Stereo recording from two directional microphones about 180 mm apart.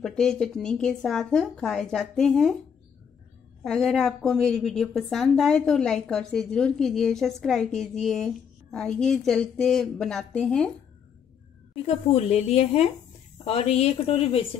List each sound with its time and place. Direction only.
0.0 s speech: 5° left (ahead or behind)
3.6 s speech: centre (ahead or behind)
11.7 s a woman's voice: 35° left (ahead or behind)